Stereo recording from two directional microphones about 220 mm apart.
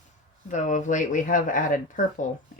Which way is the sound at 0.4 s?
35° left (ahead or behind).